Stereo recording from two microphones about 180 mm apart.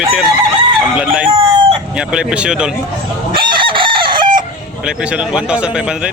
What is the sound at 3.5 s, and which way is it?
Chicken, 25° right (ahead or behind).